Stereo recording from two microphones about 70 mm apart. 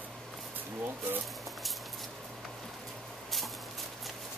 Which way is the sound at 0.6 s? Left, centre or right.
Right.